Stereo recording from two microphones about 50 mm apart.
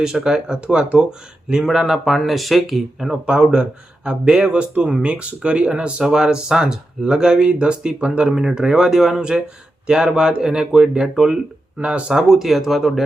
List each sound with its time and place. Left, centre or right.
0.0 s speech: centre
3.1 s speech: centre
11.8 s speech: right
12.3 s speech: centre